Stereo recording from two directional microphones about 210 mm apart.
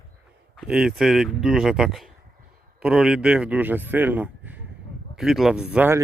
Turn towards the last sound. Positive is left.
turn(degrees=-5)  # may be behind; listen again after turning